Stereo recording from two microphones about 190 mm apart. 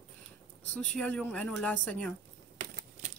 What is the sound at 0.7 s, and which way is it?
Speech, 5° left (ahead or behind).